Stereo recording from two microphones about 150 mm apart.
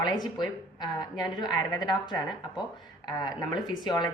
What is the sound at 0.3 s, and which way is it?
Speech, 30° left (ahead or behind).